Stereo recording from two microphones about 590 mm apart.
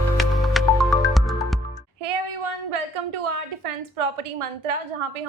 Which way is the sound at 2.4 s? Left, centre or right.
Right.